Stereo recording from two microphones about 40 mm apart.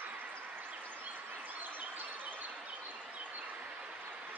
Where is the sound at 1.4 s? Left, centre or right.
Right.